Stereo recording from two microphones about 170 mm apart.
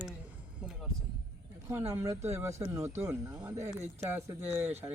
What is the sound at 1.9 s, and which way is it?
Speech, 15° right (ahead or behind).